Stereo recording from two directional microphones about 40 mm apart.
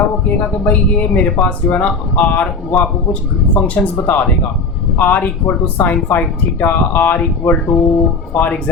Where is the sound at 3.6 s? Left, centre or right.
Left.